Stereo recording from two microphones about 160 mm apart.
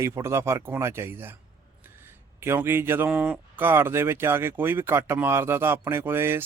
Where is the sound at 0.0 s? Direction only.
15° right (ahead or behind).